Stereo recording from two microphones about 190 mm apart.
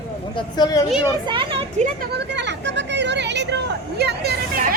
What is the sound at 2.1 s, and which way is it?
Speech, 65° right (ahead or behind).